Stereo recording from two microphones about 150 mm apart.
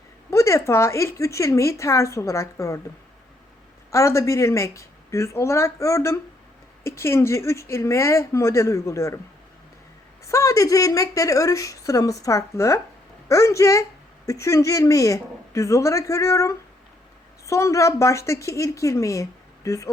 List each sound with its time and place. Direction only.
0.3 s speech: 20° left (ahead or behind)
3.9 s speech: 20° left (ahead or behind)
10.2 s speech: 20° left (ahead or behind)